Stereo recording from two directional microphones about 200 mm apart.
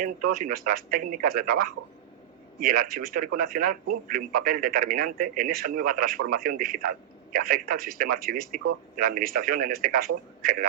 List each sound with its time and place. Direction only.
0.0 s speech: 45° right (ahead or behind)